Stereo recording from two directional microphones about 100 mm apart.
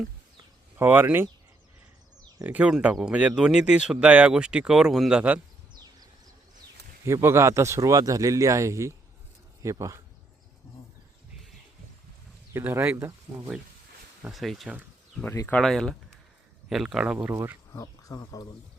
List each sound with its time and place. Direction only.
0.8 s speech: 20° right (ahead or behind)
2.4 s speech: 15° right (ahead or behind)
7.0 s speech: 25° right (ahead or behind)
12.5 s speech: 20° right (ahead or behind)
14.2 s speech: centre (ahead or behind)
17.2 s speech: 20° right (ahead or behind)
17.7 s speech: 40° left (ahead or behind)